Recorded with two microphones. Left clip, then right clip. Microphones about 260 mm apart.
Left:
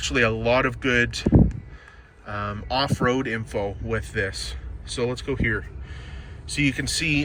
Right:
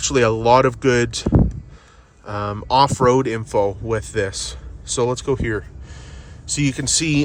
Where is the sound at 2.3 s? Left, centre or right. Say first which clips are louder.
Right 7 dB; centre.